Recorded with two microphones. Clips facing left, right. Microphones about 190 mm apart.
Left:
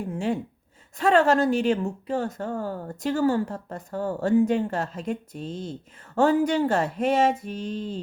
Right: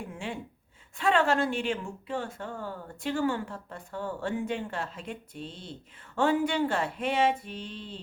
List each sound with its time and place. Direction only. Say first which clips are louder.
0.0 s gasp: left 10 dB; 40° left (ahead or behind)
0.9 s speech: left 6 dB; 40° left (ahead or behind)